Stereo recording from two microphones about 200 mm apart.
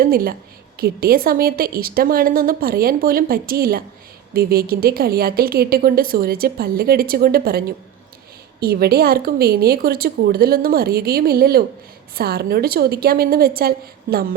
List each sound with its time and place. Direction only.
0.0 s a woman's voice: 45° right (ahead or behind)
8.6 s a woman's voice: 50° right (ahead or behind)